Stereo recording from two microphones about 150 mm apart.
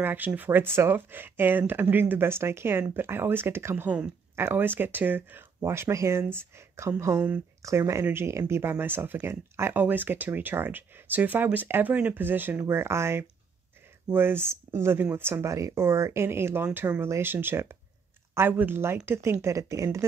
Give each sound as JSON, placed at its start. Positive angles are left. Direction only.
{"t": 0.0, "sound": "speech", "side_deg": -10}